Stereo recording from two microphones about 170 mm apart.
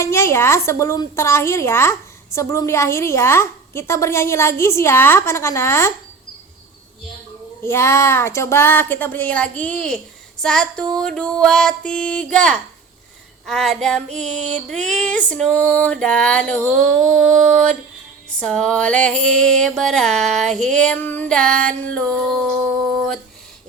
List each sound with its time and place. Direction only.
0.0 s a woman's voice: 15° left (ahead or behind)
7.6 s a woman's voice: 15° left (ahead or behind)
10.4 s female singing: 5° left (ahead or behind)
14.1 s music: 45° right (ahead or behind)
14.8 s a woman's voice: 5° left (ahead or behind)
17.5 s female singing: 5° left (ahead or behind)